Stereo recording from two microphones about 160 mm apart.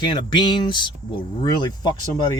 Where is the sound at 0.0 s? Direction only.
30° left (ahead or behind).